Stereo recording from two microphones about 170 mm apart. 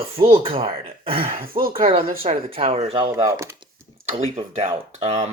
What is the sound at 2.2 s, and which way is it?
Speech, 35° right (ahead or behind).